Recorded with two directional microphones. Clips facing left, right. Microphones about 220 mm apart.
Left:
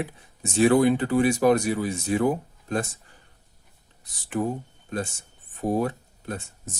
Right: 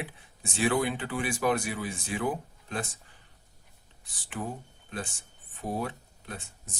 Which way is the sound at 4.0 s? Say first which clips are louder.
Left 10 dB; 45° left (ahead or behind).